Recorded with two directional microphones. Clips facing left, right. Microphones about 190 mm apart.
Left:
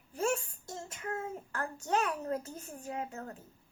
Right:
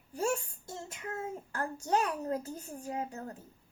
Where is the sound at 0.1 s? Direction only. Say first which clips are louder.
Even; 35° right (ahead or behind).